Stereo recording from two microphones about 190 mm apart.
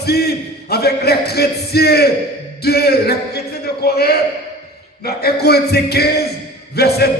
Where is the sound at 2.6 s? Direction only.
55° left (ahead or behind).